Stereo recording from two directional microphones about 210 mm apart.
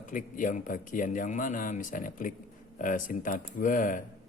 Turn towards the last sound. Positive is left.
turn(degrees=40)  # may be behind; listen again after turning